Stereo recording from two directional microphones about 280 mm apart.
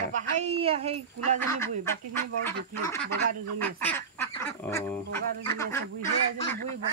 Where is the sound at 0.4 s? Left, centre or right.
Right.